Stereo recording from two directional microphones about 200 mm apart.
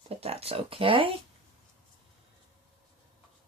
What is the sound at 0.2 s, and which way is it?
Speech, 30° right (ahead or behind).